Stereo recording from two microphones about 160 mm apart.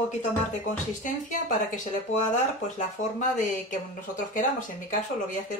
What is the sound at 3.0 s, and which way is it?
Speech, 55° left (ahead or behind).